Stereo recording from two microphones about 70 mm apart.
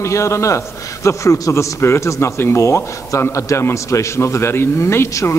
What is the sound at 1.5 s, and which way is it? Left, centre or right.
A man's voice, left.